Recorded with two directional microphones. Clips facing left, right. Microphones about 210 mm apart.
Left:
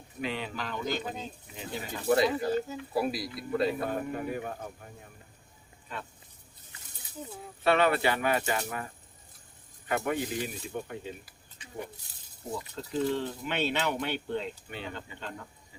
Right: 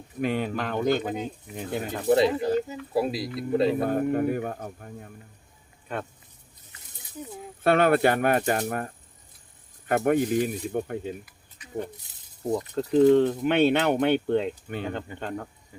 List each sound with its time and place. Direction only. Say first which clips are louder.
0.2 s speech: right 8 dB; 50° right (ahead or behind)
2.0 s speech: right 4 dB; 25° right (ahead or behind)
3.8 s speech: right 9 dB; 50° right (ahead or behind)
7.6 s speech: right 5 dB; 50° right (ahead or behind)
9.9 s speech: right 8 dB; 50° right (ahead or behind)
11.3 s a sound: right 1 dB; 30° left (ahead or behind)
12.5 s speech: right 11 dB; 55° right (ahead or behind)